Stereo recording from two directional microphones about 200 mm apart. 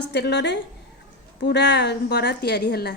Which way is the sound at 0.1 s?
55° left (ahead or behind).